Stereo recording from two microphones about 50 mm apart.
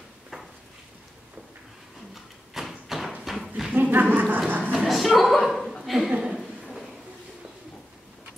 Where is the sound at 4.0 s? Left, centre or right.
Right.